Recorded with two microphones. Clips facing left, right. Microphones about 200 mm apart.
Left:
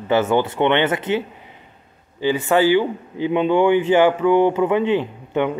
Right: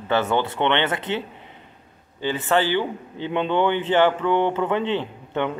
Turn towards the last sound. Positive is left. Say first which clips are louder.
# left 4 dB
turn(degrees=10)  # may be behind; listen again after turning